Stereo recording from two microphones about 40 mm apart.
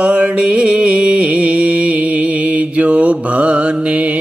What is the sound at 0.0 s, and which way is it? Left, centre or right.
Music, right.